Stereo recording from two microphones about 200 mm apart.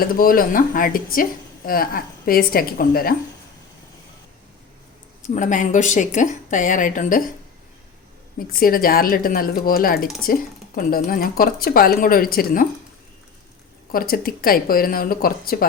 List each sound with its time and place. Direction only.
0.0 s a woman's voice: 45° left (ahead or behind)
5.3 s speech: 40° left (ahead or behind)
8.4 s a woman's voice: 45° left (ahead or behind)
13.9 s a woman's voice: 45° left (ahead or behind)